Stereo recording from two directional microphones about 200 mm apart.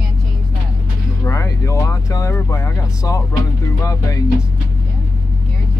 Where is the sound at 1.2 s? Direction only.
15° left (ahead or behind).